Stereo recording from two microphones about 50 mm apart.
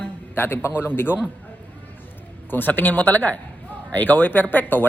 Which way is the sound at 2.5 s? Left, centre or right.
Left.